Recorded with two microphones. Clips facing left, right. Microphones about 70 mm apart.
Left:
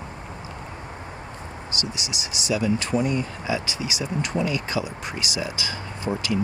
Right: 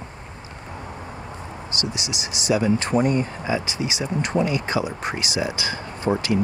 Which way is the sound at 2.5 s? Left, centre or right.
Right.